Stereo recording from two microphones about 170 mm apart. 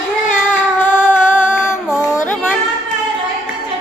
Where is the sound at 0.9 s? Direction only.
10° left (ahead or behind).